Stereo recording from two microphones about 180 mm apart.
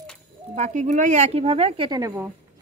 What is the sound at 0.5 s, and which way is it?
Speech, 40° right (ahead or behind).